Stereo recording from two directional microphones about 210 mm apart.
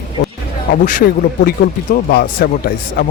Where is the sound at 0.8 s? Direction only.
40° left (ahead or behind).